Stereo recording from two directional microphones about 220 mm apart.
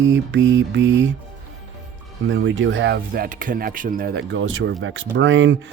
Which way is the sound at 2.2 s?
55° right (ahead or behind).